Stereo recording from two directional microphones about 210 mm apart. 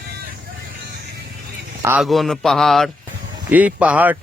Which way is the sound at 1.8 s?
5° right (ahead or behind).